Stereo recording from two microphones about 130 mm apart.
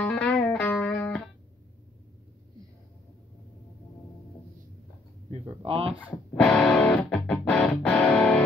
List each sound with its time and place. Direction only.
0.0 s music: 5° left (ahead or behind)
5.6 s speech: 45° right (ahead or behind)
6.3 s music: 5° left (ahead or behind)